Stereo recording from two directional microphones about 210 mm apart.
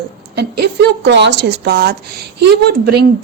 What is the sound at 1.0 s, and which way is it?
A woman's voice, 55° right (ahead or behind).